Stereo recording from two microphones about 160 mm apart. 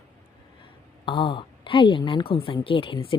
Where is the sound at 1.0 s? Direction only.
30° left (ahead or behind).